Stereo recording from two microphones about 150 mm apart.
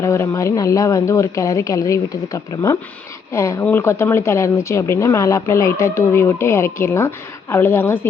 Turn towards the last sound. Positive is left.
turn(degrees=15)  # may be behind; listen again after turning